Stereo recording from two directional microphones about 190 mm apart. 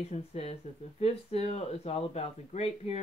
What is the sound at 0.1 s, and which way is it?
Speech, 35° left (ahead or behind).